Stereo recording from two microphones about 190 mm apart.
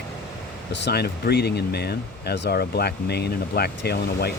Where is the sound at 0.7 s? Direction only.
65° left (ahead or behind).